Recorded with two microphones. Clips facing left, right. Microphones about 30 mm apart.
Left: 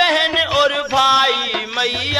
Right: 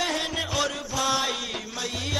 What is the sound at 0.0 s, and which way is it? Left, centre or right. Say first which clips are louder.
Music: left 12 dB; left.